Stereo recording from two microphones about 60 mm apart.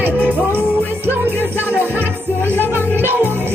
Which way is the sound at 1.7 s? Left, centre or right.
Right.